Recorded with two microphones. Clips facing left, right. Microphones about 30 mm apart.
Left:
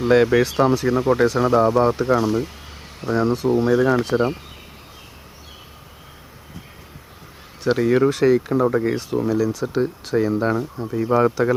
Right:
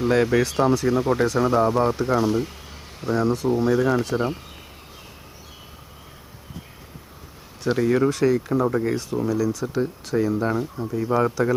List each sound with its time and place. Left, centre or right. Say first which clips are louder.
0.0 s speech: left 4 dB; centre
3.0 s speech: left 2 dB; centre
7.6 s speech: left 3 dB; centre
10.5 s speech: left 2 dB; centre